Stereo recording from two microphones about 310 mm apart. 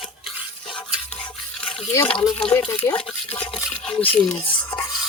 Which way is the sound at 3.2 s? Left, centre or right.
Centre.